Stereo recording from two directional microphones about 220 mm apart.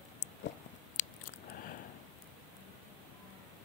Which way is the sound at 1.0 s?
40° left (ahead or behind).